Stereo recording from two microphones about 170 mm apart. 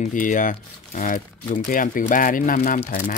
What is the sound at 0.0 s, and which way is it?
Speech, 50° left (ahead or behind).